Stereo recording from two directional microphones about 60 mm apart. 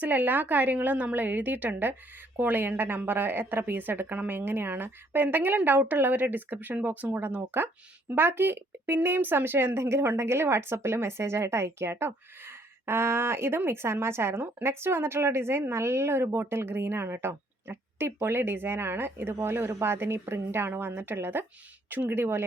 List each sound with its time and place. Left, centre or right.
0.0 s a woman's voice: right
4.4 s a woman's voice: right